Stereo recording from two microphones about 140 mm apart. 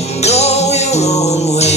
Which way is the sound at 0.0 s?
50° left (ahead or behind).